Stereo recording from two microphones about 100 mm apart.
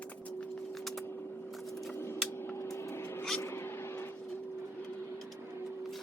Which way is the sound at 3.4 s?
25° left (ahead or behind).